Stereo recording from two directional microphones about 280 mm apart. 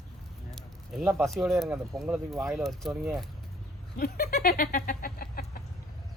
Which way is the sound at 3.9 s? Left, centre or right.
Left.